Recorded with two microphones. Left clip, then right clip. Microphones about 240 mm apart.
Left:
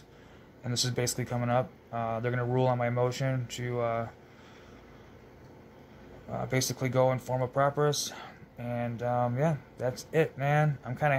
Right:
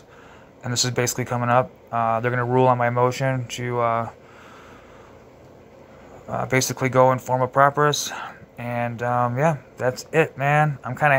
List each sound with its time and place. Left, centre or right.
0.9 s speech: centre
6.3 s speech: centre